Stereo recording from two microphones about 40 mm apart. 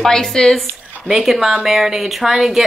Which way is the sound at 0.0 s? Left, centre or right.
Centre.